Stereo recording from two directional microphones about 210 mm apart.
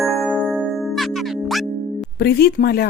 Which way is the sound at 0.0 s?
Centre (ahead or behind).